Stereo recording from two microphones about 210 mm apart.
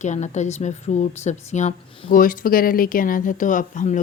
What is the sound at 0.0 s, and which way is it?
Speech, 35° left (ahead or behind).